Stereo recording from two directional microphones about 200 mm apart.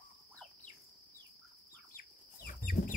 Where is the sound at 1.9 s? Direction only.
45° left (ahead or behind).